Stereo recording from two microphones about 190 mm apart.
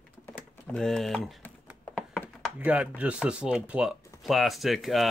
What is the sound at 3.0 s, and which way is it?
Speech, 5° right (ahead or behind).